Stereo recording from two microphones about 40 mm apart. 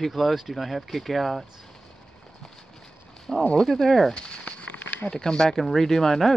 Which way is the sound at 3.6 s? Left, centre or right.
Centre.